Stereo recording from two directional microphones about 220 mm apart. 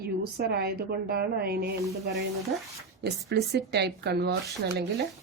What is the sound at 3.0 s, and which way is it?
A woman's voice, 50° right (ahead or behind).